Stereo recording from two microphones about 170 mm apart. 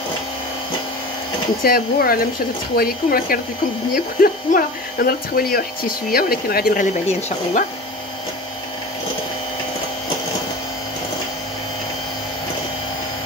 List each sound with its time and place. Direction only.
1.6 s speech: 60° left (ahead or behind); by 7.6 s 40° left (ahead or behind)